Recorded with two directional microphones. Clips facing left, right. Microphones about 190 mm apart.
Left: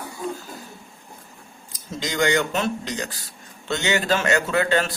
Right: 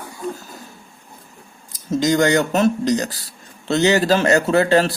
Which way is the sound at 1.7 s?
40° right (ahead or behind).